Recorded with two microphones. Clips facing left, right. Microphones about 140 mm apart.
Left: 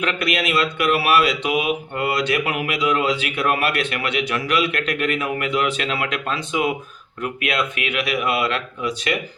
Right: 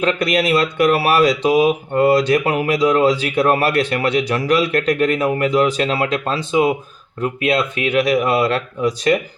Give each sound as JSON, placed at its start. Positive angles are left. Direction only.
{"t": 0.0, "sound": "speech", "side_deg": -35}